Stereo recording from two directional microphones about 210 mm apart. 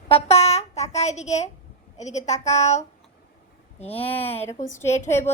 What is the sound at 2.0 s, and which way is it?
A woman's voice, 35° left (ahead or behind).